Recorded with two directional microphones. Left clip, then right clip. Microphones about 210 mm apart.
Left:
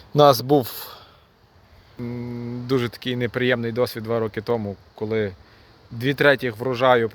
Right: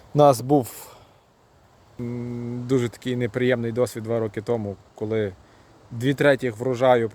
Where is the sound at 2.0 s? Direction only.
5° right (ahead or behind).